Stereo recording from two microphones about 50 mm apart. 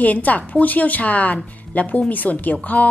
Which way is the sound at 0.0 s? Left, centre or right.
Left.